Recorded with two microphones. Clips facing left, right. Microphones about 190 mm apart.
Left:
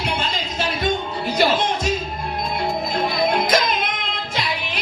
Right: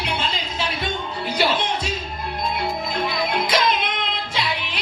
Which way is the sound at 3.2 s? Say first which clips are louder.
Left 5 dB; 45° left (ahead or behind).